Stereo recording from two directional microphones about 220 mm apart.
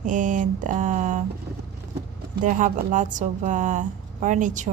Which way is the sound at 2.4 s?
35° right (ahead or behind).